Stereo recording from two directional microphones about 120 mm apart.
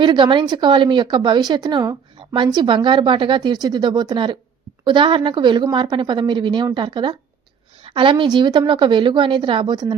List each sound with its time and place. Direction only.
0.0 s a woman's voice: 40° right (ahead or behind)